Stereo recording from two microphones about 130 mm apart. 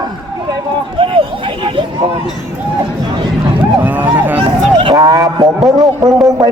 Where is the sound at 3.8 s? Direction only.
15° right (ahead or behind).